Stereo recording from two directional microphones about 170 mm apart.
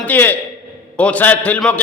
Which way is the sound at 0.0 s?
10° left (ahead or behind).